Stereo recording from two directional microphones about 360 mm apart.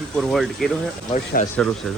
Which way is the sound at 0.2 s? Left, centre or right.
Centre.